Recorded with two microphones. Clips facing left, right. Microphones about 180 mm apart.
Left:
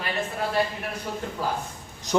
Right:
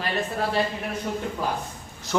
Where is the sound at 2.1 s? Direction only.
20° left (ahead or behind).